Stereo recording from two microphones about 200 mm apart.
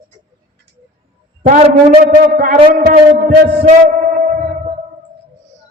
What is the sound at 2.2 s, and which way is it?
A man's voice, 45° right (ahead or behind).